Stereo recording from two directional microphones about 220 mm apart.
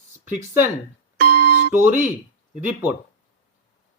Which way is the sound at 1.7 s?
10° right (ahead or behind).